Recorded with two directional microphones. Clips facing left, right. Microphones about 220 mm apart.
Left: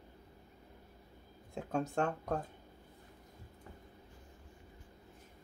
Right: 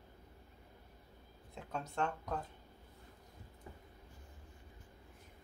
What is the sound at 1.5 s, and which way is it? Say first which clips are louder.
Speech: left 8 dB; 45° left (ahead or behind).